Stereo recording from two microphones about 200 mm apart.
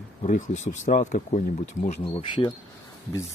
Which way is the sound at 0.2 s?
35° left (ahead or behind).